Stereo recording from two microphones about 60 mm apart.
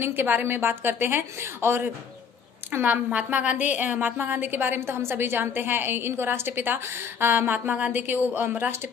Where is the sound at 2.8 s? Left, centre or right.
Right.